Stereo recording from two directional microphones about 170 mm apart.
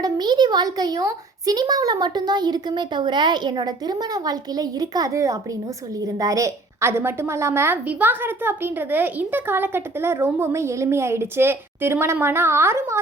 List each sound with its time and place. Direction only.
0.0 s a woman's voice: 25° right (ahead or behind)